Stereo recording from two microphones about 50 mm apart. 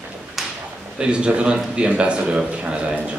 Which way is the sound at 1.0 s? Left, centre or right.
Centre.